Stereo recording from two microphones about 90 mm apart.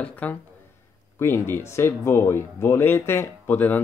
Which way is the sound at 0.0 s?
15° left (ahead or behind).